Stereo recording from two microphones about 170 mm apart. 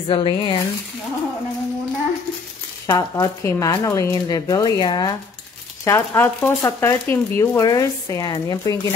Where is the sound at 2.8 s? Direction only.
20° left (ahead or behind).